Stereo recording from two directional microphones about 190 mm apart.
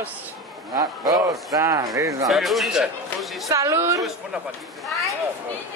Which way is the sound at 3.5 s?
15° right (ahead or behind).